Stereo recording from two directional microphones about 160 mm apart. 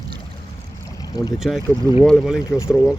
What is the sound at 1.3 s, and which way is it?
Speech, centre (ahead or behind).